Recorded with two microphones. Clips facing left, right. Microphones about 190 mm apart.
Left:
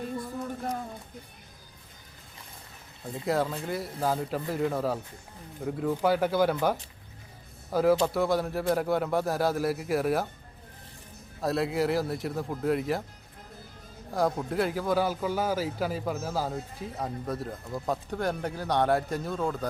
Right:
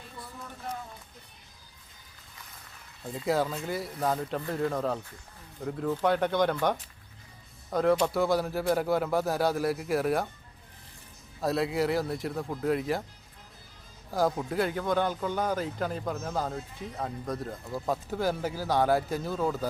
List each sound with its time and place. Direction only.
0.2 s a sound: 45° left (ahead or behind)
3.0 s speech: centre (ahead or behind)
11.3 s speech: centre (ahead or behind)
14.1 s speech: centre (ahead or behind)